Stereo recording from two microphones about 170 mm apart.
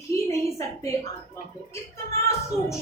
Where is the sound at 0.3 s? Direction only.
15° left (ahead or behind).